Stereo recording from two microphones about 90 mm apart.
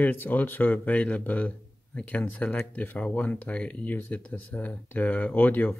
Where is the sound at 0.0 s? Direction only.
20° left (ahead or behind).